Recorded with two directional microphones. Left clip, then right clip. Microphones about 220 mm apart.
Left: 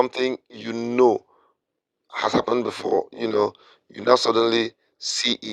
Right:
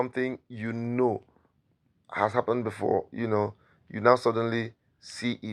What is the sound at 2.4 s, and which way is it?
Speech, 45° left (ahead or behind).